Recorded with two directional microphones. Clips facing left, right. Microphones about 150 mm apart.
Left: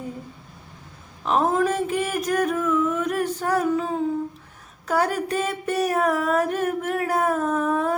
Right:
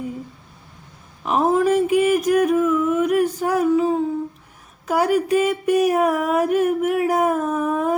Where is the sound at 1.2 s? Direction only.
10° right (ahead or behind).